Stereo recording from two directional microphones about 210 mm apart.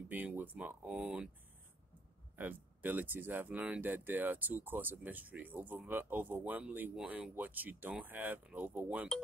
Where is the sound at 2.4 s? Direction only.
10° right (ahead or behind).